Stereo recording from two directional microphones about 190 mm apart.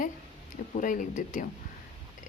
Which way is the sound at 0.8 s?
45° left (ahead or behind).